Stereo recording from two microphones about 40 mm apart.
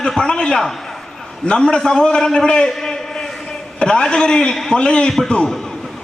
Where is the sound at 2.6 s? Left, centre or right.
Centre.